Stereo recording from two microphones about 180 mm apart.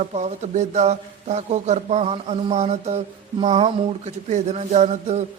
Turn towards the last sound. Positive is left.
turn(degrees=-40)  # may be behind; listen again after turning